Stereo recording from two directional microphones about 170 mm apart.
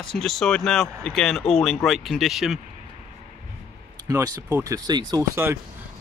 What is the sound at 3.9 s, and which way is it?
Speech, 20° right (ahead or behind).